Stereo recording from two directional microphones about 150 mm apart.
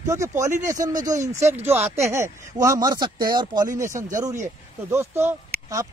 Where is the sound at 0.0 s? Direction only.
20° right (ahead or behind).